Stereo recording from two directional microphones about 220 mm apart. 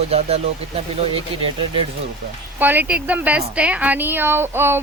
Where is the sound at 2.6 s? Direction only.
10° right (ahead or behind).